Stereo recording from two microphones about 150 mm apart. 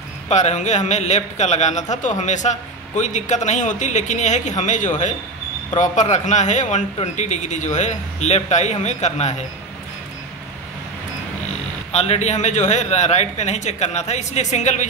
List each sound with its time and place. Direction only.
0.3 s speech: 50° left (ahead or behind)
11.9 s speech: 45° left (ahead or behind)